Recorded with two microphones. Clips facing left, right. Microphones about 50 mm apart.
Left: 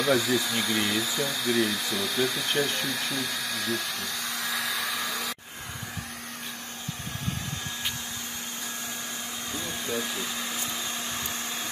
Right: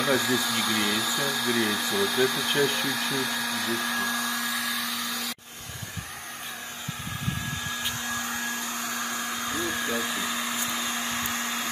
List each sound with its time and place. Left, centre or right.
0.0 s speech: centre
4.4 s hair dryer: centre
9.7 s hair dryer: right